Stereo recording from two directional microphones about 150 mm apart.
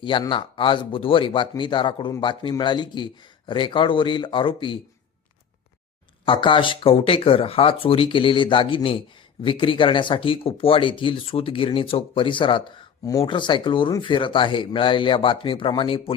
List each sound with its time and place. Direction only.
0.0 s speech: 35° left (ahead or behind)
6.2 s speech: 35° left (ahead or behind)